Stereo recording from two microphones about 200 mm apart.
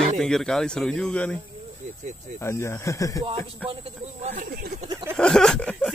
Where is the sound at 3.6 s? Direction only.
30° right (ahead or behind).